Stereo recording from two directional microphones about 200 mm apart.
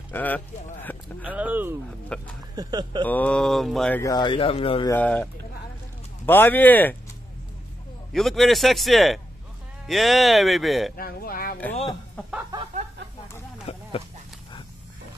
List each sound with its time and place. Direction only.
0.1 s speech: 10° left (ahead or behind)
1.2 s speech: 5° right (ahead or behind)
2.1 s a man's voice: 5° left (ahead or behind)
2.5 s speech: 20° right (ahead or behind)
3.0 s a man's voice: 10° left (ahead or behind)
4.0 s speech: 20° left (ahead or behind)
4.9 s speech: 5° left (ahead or behind)
8.1 s a man's voice: centre (ahead or behind)
11.0 s speech: 50° left (ahead or behind)
12.2 s snicker: 5° left (ahead or behind)
13.7 s a sound: 30° left (ahead or behind)